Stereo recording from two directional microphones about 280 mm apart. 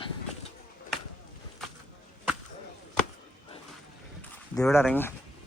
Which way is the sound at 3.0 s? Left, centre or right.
Centre.